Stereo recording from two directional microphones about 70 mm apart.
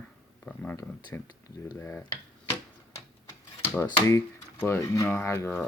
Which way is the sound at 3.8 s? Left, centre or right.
Left.